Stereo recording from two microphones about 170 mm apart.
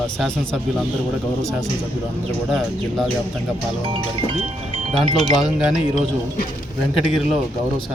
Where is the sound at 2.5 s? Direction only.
Centre (ahead or behind).